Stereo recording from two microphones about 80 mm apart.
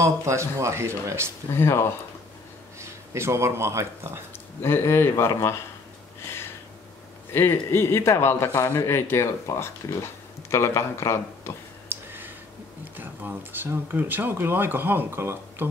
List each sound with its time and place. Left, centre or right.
0.0 s speech: right
1.5 s speech: left
2.8 s speech: right
4.3 s speech: left
6.2 s a sound: left
7.7 s speech: left
11.9 s a sound: right
12.9 s speech: right